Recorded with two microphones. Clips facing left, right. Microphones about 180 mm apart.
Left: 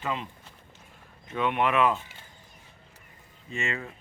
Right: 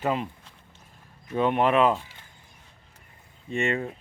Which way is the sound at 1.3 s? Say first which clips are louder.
Right 4 dB; 35° right (ahead or behind).